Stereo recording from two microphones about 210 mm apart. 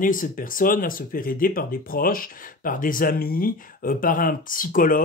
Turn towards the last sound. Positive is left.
turn(degrees=40)  # may be behind; listen again after turning